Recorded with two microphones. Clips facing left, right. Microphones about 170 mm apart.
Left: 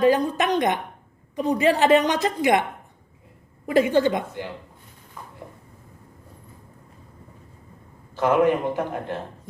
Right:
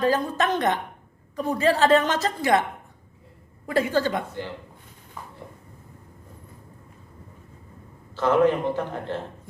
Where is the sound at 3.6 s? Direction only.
20° left (ahead or behind).